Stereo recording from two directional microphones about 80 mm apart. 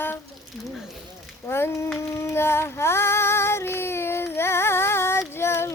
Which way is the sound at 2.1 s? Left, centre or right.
Left.